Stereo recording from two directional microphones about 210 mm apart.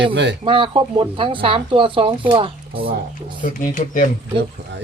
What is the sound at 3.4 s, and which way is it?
Speech, 40° left (ahead or behind).